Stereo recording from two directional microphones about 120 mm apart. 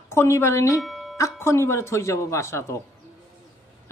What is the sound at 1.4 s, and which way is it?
A man's voice, 20° left (ahead or behind).